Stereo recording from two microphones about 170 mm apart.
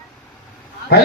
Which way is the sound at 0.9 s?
65° left (ahead or behind).